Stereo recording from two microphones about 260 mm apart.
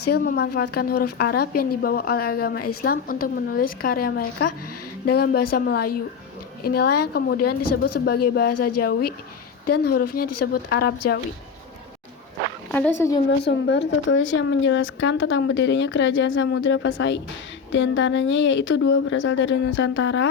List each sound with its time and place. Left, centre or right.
0.1 s a woman's voice: left
9.6 s a woman's voice: left
9.9 s a woman's voice: left
12.7 s speech: centre
13.4 s a woman's voice: left